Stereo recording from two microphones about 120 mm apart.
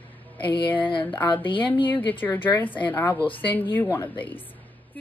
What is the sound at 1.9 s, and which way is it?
Speech, 15° left (ahead or behind).